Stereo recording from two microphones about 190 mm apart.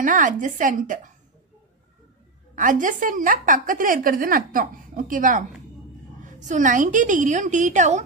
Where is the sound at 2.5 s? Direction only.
45° right (ahead or behind).